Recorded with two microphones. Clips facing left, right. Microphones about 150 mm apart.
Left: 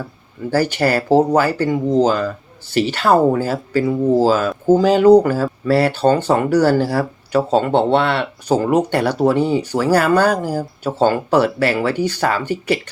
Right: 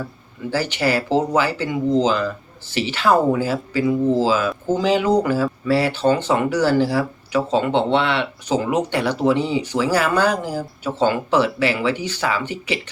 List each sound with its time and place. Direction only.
0.5 s speech: 50° left (ahead or behind)
8.7 s speech: 55° left (ahead or behind)